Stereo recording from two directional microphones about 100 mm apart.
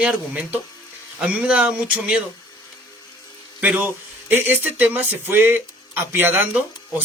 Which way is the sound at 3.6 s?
15° right (ahead or behind).